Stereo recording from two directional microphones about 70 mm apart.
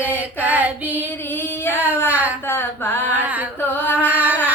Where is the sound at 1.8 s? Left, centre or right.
Left.